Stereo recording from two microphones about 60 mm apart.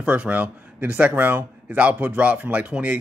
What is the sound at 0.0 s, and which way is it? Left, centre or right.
Speech, right.